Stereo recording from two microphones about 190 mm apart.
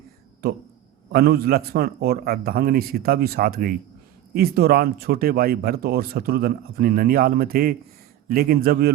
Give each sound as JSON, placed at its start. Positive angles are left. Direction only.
{"t": 0.4, "sound": "speech", "side_deg": -55}